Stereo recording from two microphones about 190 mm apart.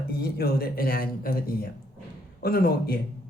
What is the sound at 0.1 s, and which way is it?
A man's voice, 55° left (ahead or behind).